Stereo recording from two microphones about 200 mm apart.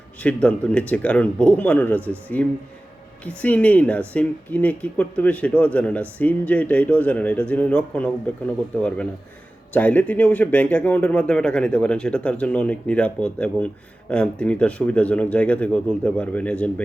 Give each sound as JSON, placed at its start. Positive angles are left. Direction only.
{"t": 0.2, "sound": "speech", "side_deg": 5}
{"t": 9.7, "sound": "speech", "side_deg": 10}